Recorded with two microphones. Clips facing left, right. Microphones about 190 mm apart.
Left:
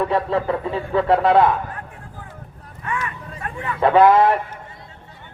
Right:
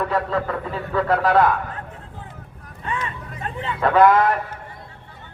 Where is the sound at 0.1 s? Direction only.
25° left (ahead or behind).